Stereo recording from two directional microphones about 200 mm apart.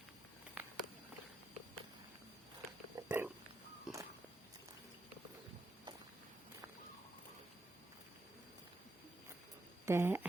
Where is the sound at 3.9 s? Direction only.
5° right (ahead or behind).